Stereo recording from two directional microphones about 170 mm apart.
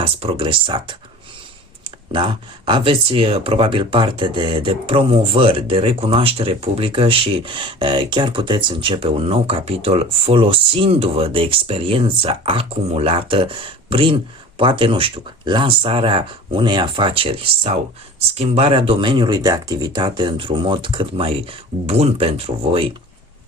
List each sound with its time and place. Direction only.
0.0 s speech: 35° right (ahead or behind)
2.1 s speech: 30° right (ahead or behind)